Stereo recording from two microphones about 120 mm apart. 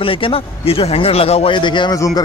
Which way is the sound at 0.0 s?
50° left (ahead or behind).